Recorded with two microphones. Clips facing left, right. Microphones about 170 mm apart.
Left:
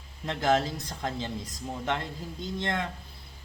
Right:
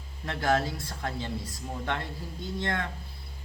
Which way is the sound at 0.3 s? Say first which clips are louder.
Left 1 dB; 20° left (ahead or behind).